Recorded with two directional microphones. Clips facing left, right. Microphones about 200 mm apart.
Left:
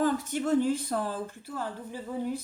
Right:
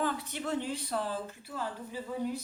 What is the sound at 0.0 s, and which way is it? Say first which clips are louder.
Speech: left 6 dB; 45° left (ahead or behind).